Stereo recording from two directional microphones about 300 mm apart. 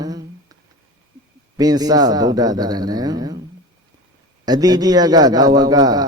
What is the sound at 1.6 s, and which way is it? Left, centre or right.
A man's voice, centre.